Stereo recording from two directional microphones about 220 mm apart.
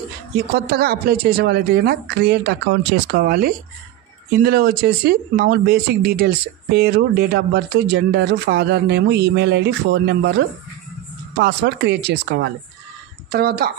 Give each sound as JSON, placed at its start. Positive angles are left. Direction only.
{"t": 0.5, "sound": "speech", "side_deg": -45}